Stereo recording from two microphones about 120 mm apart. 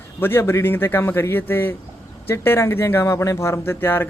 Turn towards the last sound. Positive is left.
turn(degrees=20)  # may be behind; listen again after turning